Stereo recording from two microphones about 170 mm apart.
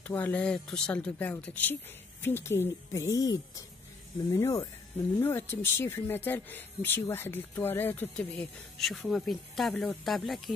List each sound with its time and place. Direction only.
0.0 s speech: 10° left (ahead or behind)